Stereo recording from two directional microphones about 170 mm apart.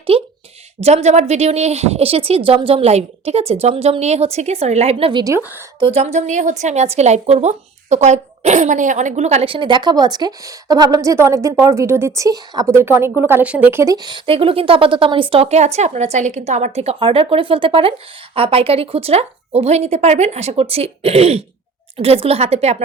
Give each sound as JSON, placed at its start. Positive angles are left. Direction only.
{"t": 0.1, "sound": "a woman's voice", "side_deg": -35}